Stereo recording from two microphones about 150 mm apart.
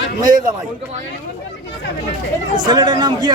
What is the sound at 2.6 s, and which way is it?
Speech, 30° right (ahead or behind).